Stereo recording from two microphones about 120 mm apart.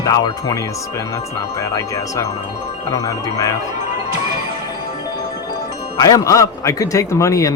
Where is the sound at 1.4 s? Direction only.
25° left (ahead or behind).